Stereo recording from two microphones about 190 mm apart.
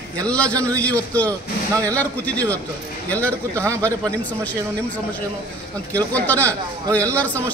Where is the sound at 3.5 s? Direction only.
15° right (ahead or behind).